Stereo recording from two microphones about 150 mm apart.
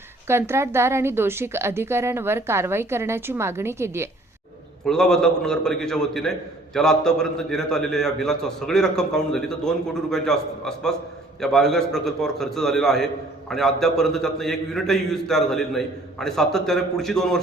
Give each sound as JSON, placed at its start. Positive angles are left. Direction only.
{"t": 0.3, "sound": "a woman's voice", "side_deg": -15}
{"t": 4.9, "sound": "a man's voice", "side_deg": 5}